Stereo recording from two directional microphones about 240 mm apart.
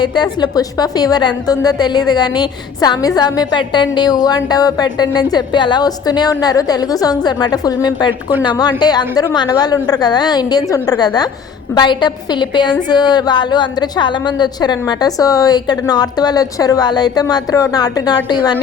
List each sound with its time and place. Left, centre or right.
0.0 s a woman's voice: centre